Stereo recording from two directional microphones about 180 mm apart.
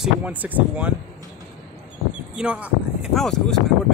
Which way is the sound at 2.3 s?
5° right (ahead or behind).